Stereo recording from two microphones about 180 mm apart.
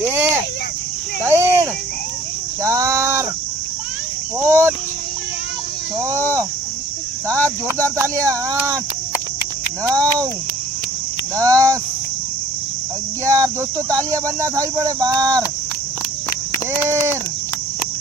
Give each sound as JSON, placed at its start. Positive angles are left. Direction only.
{"t": 1.3, "sound": "a sound", "side_deg": -15}
{"t": 2.6, "sound": "a sound", "side_deg": -15}
{"t": 4.4, "sound": "cricket", "side_deg": -15}
{"t": 7.3, "sound": "speech", "side_deg": 10}
{"t": 7.9, "sound": "speech", "side_deg": -15}
{"t": 9.8, "sound": "speech", "side_deg": -20}
{"t": 11.3, "sound": "speech", "side_deg": -20}
{"t": 13.2, "sound": "speech", "side_deg": -15}